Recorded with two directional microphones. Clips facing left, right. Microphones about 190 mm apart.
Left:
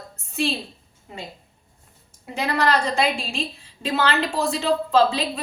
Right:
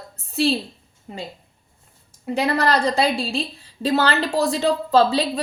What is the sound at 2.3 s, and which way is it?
Speech, 35° right (ahead or behind).